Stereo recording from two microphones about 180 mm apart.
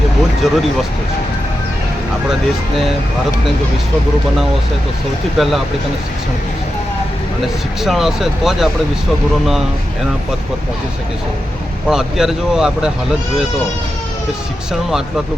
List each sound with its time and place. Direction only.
0.4 s speech: 5° right (ahead or behind)
5.4 s speech: centre (ahead or behind)
7.8 s speech: centre (ahead or behind)
11.9 s speech: centre (ahead or behind)
14.7 s speech: centre (ahead or behind)